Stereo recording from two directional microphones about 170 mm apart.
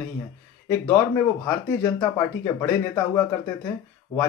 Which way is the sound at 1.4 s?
20° left (ahead or behind).